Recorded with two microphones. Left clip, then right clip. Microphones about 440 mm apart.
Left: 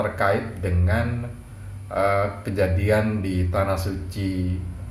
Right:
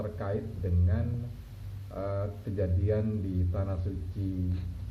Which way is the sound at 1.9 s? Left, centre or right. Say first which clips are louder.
Left 14 dB; centre.